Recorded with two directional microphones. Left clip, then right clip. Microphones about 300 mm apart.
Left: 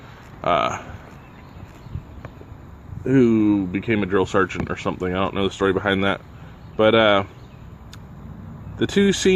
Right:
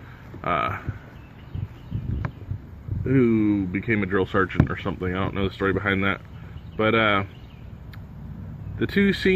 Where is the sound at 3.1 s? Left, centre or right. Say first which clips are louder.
Left 4 dB; centre.